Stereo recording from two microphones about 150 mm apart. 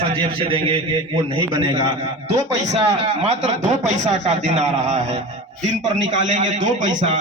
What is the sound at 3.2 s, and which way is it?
A man's voice, 50° right (ahead or behind).